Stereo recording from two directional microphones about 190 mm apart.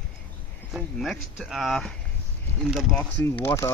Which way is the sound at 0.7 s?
Centre (ahead or behind).